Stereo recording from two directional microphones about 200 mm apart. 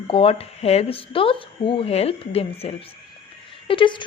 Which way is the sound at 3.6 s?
25° left (ahead or behind).